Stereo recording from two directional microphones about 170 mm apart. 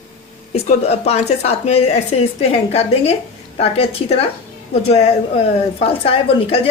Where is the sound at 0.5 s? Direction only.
40° left (ahead or behind).